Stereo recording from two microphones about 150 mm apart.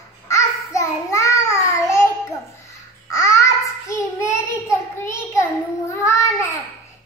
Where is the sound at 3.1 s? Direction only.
20° left (ahead or behind).